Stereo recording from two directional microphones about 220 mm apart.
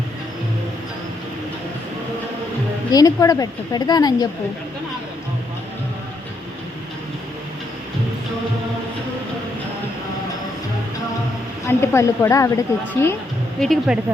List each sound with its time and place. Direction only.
2.9 s a woman's voice: 15° left (ahead or behind)
11.6 s a woman's voice: 10° left (ahead or behind)
13.6 s speech: centre (ahead or behind)